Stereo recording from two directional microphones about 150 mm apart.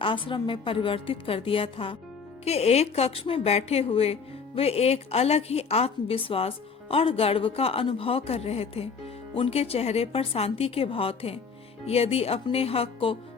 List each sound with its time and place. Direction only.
0.0 s a woman's voice: 35° left (ahead or behind)